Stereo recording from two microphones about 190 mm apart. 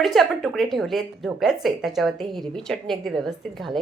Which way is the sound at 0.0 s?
Centre (ahead or behind).